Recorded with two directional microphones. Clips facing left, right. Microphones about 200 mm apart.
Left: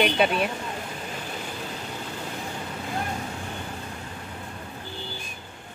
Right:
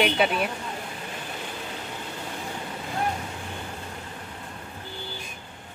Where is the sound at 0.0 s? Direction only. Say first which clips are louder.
Left 1 dB; centre (ahead or behind).